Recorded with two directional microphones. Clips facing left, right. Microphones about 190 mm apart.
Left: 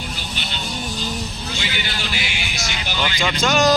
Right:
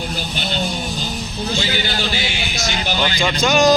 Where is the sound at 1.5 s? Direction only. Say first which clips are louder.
Right 6 dB; 30° right (ahead or behind).